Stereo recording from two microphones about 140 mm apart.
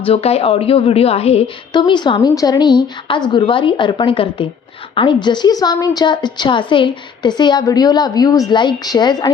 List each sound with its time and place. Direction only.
0.0 s a woman's voice: 45° left (ahead or behind)
1.7 s a woman's voice: 35° left (ahead or behind)